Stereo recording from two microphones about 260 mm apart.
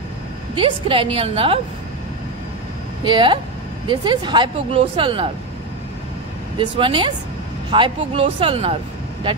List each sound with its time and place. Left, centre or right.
0.6 s a woman's voice: centre
3.0 s speech: centre
6.6 s a woman's voice: centre